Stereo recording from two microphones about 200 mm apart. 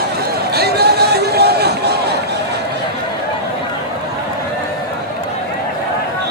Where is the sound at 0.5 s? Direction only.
50° right (ahead or behind).